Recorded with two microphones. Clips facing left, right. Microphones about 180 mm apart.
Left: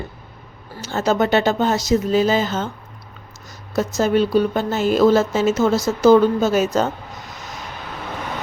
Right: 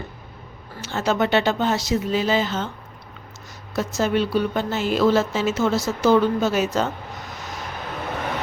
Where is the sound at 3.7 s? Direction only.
40° left (ahead or behind).